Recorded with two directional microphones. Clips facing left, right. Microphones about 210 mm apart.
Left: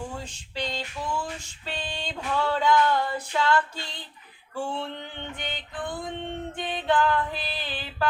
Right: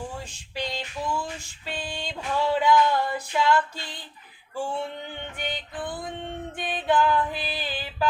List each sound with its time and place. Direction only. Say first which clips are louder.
0.5 s female singing: even; 10° right (ahead or behind)
1.6 s a sound: right 1 dB; 10° right (ahead or behind)
4.5 s male singing: right 1 dB; 10° right (ahead or behind)
5.4 s music: right 3 dB; 10° right (ahead or behind)